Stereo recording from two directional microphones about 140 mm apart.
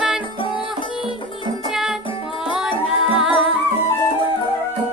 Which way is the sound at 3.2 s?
5° right (ahead or behind).